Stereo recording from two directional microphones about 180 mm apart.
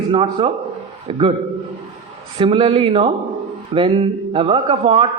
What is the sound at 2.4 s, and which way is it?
A man's voice, 30° right (ahead or behind).